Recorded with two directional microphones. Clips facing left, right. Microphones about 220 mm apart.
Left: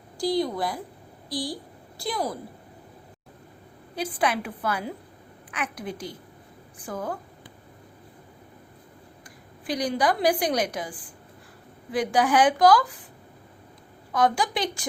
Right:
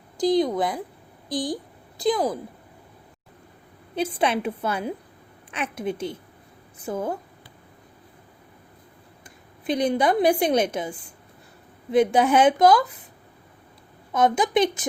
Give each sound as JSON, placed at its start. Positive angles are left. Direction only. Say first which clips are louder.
{"t": 0.2, "sound": "a woman's voice", "louder": "right 5 dB", "side_deg": -20}
{"t": 3.9, "sound": "a woman's voice", "louder": "right 3 dB", "side_deg": -25}
{"t": 9.6, "sound": "a woman's voice", "louder": "right 4 dB", "side_deg": -25}
{"t": 14.1, "sound": "a woman's voice", "louder": "right 3 dB", "side_deg": -20}